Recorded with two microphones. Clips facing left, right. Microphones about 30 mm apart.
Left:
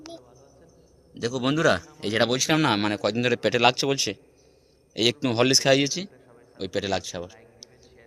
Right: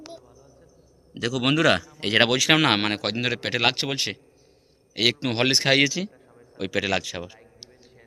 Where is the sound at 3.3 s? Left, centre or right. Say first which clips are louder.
Left 3 dB; centre.